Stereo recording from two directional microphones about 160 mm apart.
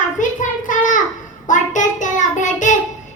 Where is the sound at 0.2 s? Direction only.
55° left (ahead or behind).